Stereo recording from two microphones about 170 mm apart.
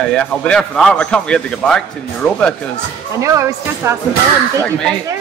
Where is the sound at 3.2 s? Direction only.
20° right (ahead or behind).